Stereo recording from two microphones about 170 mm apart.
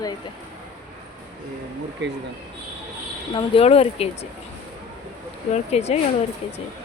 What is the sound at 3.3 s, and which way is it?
Speech, 35° left (ahead or behind).